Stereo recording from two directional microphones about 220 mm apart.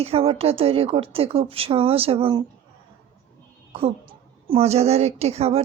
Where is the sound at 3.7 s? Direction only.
25° right (ahead or behind).